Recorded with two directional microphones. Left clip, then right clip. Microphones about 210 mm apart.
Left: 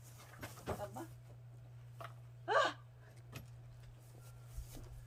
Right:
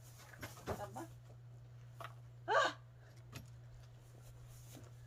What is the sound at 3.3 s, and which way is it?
Keys jangling, centre (ahead or behind).